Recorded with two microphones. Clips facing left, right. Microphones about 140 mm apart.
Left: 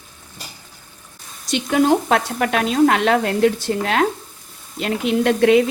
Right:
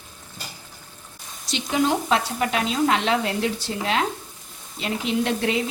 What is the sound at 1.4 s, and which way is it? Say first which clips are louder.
Speech: left 6 dB; 55° left (ahead or behind).